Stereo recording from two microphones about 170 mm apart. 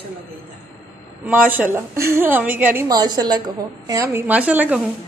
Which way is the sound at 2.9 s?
25° right (ahead or behind).